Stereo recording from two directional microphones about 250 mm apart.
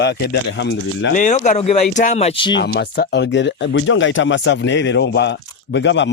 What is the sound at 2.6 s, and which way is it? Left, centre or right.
Speech, left.